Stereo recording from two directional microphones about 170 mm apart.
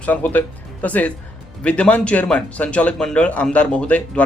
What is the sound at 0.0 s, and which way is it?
Speech, 10° left (ahead or behind).